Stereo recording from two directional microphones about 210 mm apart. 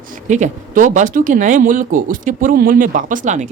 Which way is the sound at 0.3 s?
35° right (ahead or behind).